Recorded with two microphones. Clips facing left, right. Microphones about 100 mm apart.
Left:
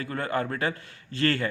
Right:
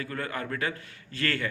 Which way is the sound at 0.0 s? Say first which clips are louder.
Left 5 dB; 30° left (ahead or behind).